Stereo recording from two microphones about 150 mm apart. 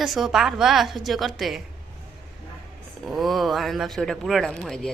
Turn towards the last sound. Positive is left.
turn(degrees=0)  # may be behind; listen again after turning